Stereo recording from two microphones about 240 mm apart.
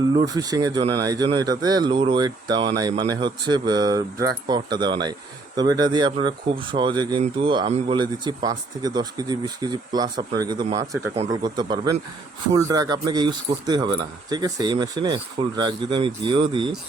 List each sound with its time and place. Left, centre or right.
0.1 s speech: centre